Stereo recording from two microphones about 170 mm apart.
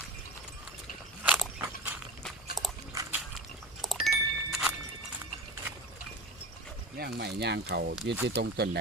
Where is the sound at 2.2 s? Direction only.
Centre (ahead or behind).